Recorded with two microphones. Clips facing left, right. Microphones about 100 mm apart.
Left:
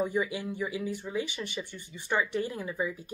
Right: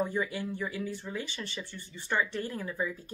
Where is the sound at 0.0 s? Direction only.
15° left (ahead or behind).